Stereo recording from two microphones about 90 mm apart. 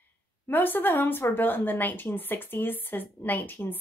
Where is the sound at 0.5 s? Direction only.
20° left (ahead or behind).